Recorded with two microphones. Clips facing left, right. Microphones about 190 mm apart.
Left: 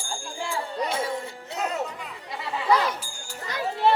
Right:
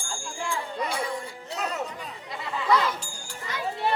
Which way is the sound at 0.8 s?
25° left (ahead or behind).